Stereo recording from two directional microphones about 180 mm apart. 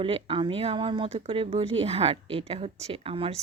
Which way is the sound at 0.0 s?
30° right (ahead or behind).